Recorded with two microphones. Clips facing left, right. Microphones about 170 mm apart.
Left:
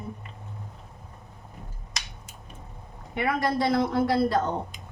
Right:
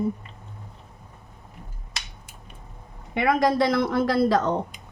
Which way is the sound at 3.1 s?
85° right.